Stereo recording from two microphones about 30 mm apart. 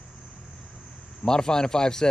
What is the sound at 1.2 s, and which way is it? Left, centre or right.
Speech, left.